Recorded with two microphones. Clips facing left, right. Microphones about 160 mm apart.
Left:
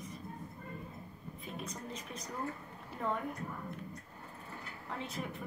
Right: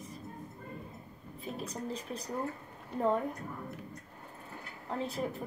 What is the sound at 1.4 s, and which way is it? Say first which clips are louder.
Speech: right 5 dB; 35° right (ahead or behind).